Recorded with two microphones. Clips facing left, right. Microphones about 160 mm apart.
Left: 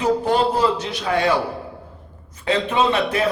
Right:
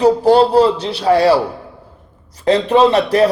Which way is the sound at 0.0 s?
35° right (ahead or behind).